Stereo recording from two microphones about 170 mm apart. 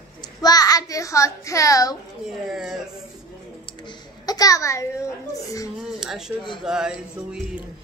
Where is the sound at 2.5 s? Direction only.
5° right (ahead or behind).